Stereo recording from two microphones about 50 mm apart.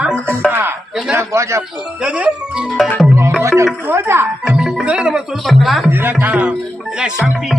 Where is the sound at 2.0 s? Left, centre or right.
Right.